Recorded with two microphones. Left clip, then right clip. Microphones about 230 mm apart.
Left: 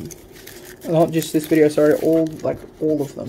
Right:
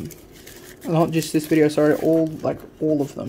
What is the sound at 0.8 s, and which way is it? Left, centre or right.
Speech, centre.